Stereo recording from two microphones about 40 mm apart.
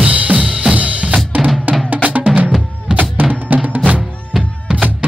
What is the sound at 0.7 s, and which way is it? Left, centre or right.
Drum kit, right.